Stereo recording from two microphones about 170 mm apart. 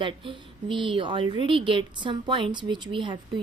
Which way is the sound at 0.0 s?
30° right (ahead or behind).